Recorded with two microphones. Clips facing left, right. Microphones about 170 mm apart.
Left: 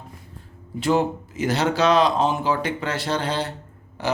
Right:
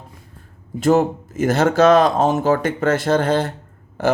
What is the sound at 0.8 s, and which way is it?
Speech, 45° right (ahead or behind).